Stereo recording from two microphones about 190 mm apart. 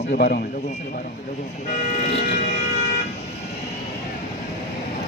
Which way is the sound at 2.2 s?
40° left (ahead or behind).